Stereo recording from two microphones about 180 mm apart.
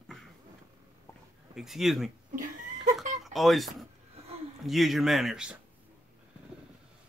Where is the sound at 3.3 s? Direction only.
Centre (ahead or behind).